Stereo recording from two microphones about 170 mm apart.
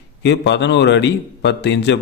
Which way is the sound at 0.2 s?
90° left.